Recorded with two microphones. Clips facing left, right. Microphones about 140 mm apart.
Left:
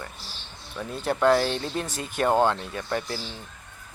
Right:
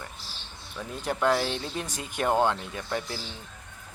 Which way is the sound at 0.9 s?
10° right (ahead or behind).